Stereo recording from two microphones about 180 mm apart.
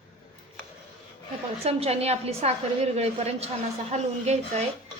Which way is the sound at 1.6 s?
35° right (ahead or behind).